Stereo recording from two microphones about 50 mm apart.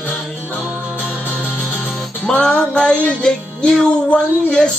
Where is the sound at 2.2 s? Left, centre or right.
Centre.